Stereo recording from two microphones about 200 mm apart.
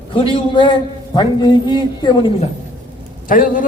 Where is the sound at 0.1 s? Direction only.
25° left (ahead or behind).